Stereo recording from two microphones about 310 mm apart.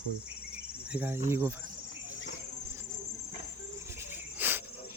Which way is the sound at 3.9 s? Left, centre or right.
Centre.